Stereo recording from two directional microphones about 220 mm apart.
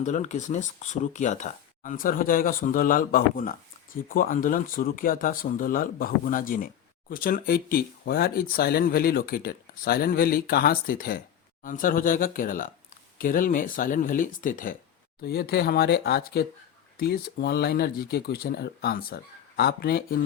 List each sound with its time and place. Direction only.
0.0 s speech: 35° left (ahead or behind)